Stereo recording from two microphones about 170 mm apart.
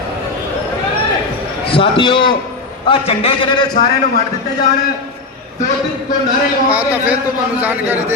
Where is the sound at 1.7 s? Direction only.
30° left (ahead or behind).